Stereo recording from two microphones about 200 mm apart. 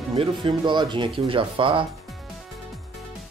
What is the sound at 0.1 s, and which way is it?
Speech, 25° right (ahead or behind).